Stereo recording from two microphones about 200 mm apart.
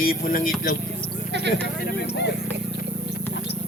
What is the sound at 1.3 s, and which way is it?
Speech, 60° right (ahead or behind).